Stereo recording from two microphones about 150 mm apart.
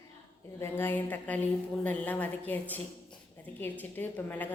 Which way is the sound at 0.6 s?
15° left (ahead or behind).